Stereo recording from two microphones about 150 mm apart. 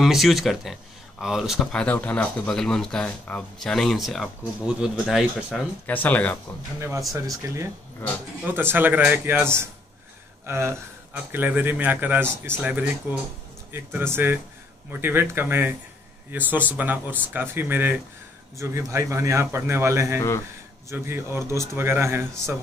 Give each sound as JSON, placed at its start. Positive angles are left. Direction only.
{"t": 0.0, "sound": "speech", "side_deg": 0}
{"t": 5.9, "sound": "speech", "side_deg": 10}
{"t": 7.4, "sound": "a man's voice", "side_deg": -20}
{"t": 20.2, "sound": "a man's voice", "side_deg": 20}
{"t": 20.9, "sound": "speech", "side_deg": -15}